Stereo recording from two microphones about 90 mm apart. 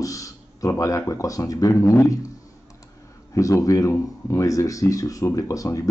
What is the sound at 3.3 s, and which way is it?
Speech, 35° left (ahead or behind).